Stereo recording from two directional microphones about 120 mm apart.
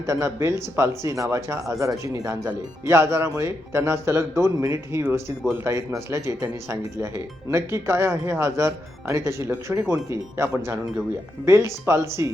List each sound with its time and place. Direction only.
0.0 s speech: 25° right (ahead or behind)